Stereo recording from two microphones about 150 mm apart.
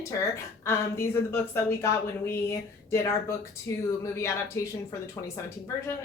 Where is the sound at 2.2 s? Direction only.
15° left (ahead or behind).